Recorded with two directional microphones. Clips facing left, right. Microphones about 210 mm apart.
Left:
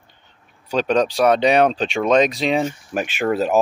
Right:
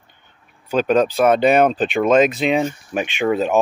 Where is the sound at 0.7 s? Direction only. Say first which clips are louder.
Right 2 dB; 5° right (ahead or behind).